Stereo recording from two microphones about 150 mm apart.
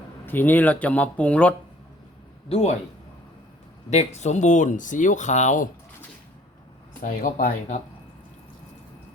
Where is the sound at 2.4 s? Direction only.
45° left (ahead or behind).